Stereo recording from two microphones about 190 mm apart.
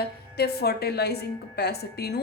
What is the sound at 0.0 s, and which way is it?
Speech, 55° left (ahead or behind).